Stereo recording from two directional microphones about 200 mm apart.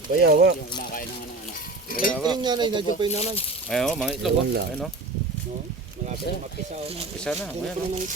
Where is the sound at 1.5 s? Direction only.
45° left (ahead or behind).